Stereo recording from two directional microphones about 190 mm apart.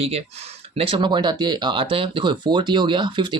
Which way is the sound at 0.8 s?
25° right (ahead or behind).